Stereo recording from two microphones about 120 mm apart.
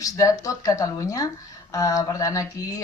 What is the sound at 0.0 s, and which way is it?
A woman's voice, 30° left (ahead or behind).